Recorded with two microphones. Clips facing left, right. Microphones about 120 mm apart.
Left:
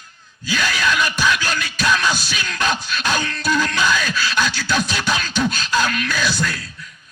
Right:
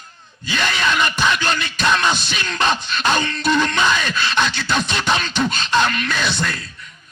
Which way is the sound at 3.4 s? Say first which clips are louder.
Right 1 dB; 5° left (ahead or behind).